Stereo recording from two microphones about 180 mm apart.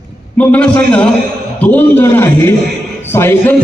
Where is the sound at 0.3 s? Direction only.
5° left (ahead or behind).